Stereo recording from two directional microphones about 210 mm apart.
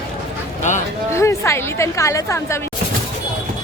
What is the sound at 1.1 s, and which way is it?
A woman's voice, 15° left (ahead or behind).